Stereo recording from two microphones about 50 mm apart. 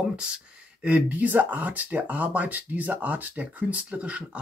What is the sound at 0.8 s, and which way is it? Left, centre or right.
Speech, right.